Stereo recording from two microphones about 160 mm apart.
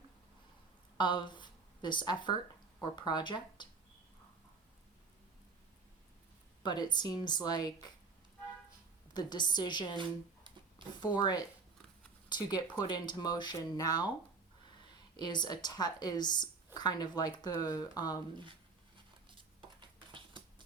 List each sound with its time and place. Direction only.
0.9 s speech: 30° left (ahead or behind)
6.6 s speech: 25° left (ahead or behind)
9.1 s speech: 25° left (ahead or behind)
9.9 s a sound: 30° right (ahead or behind)
11.0 s speech: 25° left (ahead or behind)
15.1 s speech: 25° left (ahead or behind)